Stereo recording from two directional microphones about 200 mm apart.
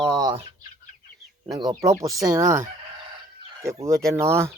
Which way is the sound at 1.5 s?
20° right (ahead or behind).